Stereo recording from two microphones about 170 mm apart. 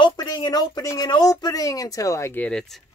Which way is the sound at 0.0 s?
25° left (ahead or behind).